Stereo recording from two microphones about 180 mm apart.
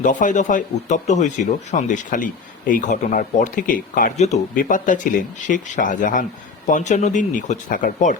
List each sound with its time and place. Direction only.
0.0 s speech: 45° left (ahead or behind)